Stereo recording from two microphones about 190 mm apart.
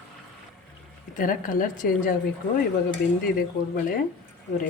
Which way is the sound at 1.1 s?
45° left (ahead or behind).